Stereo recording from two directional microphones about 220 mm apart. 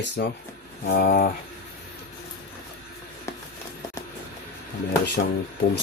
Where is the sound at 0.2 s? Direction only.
45° left (ahead or behind).